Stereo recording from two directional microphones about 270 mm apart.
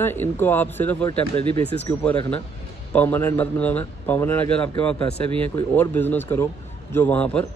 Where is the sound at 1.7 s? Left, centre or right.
Centre.